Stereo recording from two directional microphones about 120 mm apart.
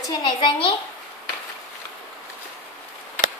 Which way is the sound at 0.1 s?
40° left (ahead or behind).